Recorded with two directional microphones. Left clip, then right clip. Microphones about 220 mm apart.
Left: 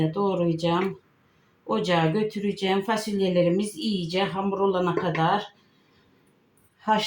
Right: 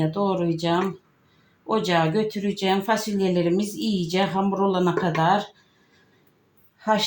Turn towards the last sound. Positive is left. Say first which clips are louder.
# right 1 dB
turn(degrees=-35)  # may be behind; listen again after turning